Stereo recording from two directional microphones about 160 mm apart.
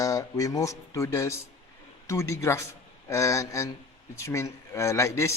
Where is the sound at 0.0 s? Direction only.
20° left (ahead or behind).